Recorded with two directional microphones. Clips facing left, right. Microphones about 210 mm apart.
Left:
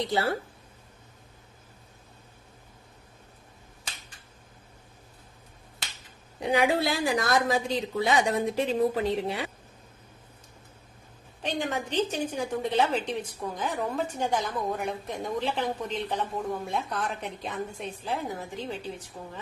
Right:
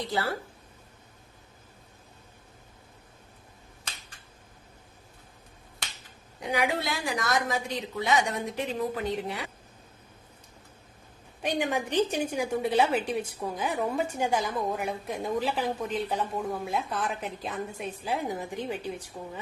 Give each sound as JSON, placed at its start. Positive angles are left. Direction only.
{"t": 6.4, "sound": "a woman's voice", "side_deg": 30}
{"t": 11.4, "sound": "a woman's voice", "side_deg": -10}